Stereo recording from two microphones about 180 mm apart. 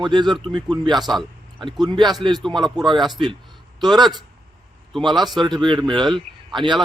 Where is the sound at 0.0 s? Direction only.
25° right (ahead or behind).